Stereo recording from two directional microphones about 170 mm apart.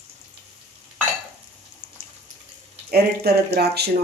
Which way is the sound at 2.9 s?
70° right (ahead or behind).